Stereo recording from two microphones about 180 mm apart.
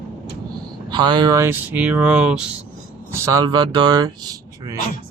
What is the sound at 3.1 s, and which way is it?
Speech, 20° right (ahead or behind).